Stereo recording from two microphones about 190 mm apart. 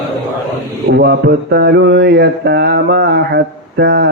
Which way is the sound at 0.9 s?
60° right (ahead or behind).